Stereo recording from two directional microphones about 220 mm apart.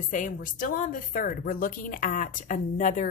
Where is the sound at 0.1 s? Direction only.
35° left (ahead or behind).